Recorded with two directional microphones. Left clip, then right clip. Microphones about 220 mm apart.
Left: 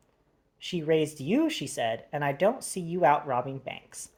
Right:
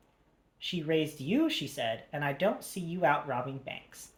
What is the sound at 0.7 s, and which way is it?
Speech, 40° left (ahead or behind).